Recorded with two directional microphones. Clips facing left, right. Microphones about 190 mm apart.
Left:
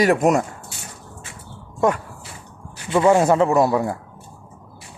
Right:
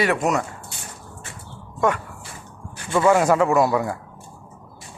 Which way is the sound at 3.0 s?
25° left (ahead or behind).